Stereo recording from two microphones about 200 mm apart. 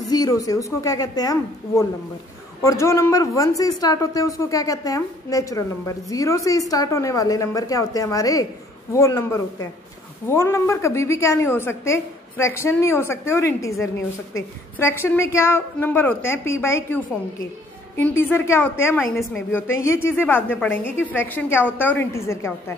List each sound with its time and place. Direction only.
0.1 s a woman's voice: 20° left (ahead or behind)